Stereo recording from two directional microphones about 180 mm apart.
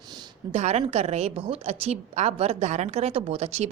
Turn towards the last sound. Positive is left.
turn(degrees=-35)  # may be behind; listen again after turning